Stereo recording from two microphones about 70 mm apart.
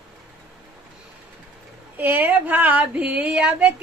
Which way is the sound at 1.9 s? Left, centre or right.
Right.